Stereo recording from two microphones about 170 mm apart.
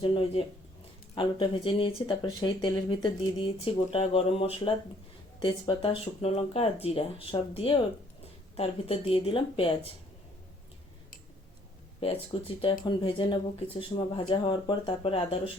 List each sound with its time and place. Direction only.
0.0 s speech: 30° left (ahead or behind)
11.9 s speech: 35° left (ahead or behind)